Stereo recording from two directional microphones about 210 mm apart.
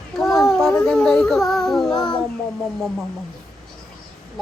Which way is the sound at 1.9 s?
20° left (ahead or behind).